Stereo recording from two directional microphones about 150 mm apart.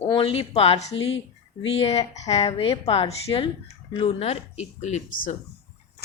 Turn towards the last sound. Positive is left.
turn(degrees=50)  # may be behind; listen again after turning